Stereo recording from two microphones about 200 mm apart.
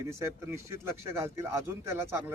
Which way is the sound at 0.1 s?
15° right (ahead or behind).